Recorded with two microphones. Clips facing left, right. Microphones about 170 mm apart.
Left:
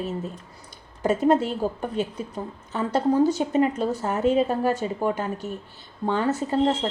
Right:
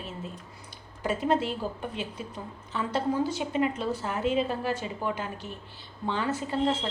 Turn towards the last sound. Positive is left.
turn(degrees=40)  # may be behind; listen again after turning